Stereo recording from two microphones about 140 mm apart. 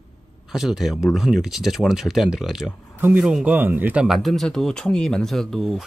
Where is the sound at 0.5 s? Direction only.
5° right (ahead or behind).